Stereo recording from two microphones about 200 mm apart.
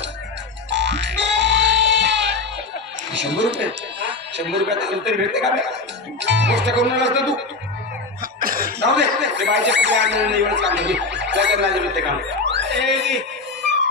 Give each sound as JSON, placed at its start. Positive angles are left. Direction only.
{"t": 0.7, "sound": "music", "side_deg": -60}
{"t": 3.1, "sound": "speech", "side_deg": -60}
{"t": 8.2, "sound": "speech", "side_deg": -45}
{"t": 12.4, "sound": "a sound", "side_deg": -60}